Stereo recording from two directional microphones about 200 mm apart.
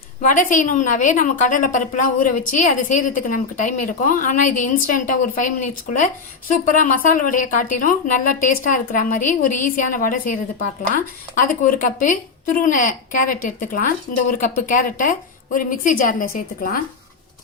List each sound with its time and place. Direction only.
0.2 s a woman's voice: 40° left (ahead or behind)